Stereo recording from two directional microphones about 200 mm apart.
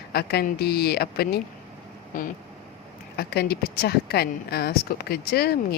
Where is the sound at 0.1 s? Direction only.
50° left (ahead or behind).